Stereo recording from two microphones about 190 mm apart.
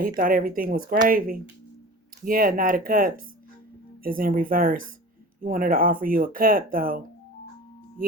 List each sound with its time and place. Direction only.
0.2 s speech: 50° right (ahead or behind)